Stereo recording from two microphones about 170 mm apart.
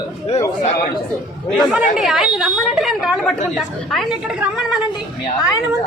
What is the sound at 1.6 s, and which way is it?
Speech, 5° right (ahead or behind).